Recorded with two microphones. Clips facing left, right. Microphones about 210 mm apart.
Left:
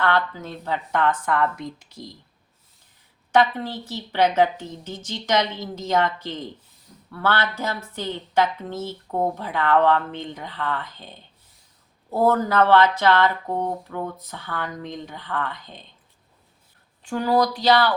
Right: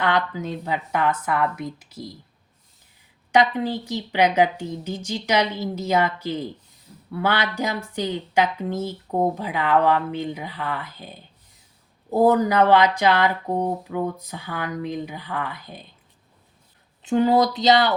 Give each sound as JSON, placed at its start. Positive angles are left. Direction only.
{"t": 0.0, "sound": "a woman's voice", "side_deg": -15}
{"t": 3.3, "sound": "a woman's voice", "side_deg": -15}
{"t": 17.0, "sound": "speech", "side_deg": -20}